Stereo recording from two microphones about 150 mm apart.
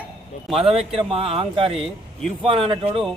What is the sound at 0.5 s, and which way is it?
A man's voice, 40° right (ahead or behind).